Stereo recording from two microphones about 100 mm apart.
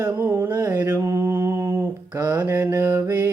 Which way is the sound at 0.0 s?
25° right (ahead or behind).